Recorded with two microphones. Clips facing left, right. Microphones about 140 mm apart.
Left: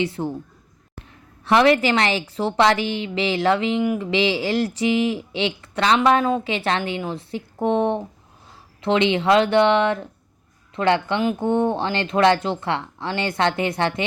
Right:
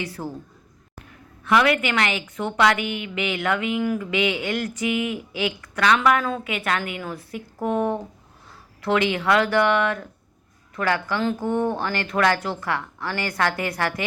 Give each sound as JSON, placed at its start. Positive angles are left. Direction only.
{"t": 0.0, "sound": "speech", "side_deg": 25}
{"t": 1.5, "sound": "a woman's voice", "side_deg": 30}